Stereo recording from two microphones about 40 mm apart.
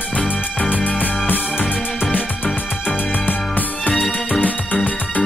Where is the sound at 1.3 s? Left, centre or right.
Left.